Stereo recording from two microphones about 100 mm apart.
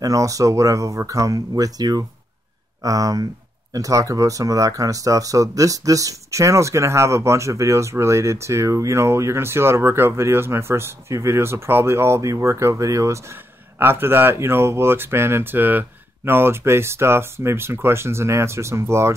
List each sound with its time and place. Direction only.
0.0 s speech: 35° right (ahead or behind)